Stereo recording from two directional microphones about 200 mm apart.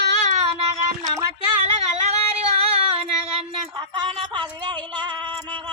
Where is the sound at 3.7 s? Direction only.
20° right (ahead or behind).